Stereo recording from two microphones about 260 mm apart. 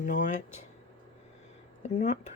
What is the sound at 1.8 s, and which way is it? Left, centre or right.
Speech, left.